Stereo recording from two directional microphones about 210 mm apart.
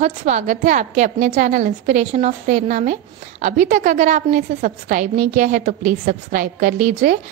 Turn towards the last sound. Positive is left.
turn(degrees=-40)  # may be behind; listen again after turning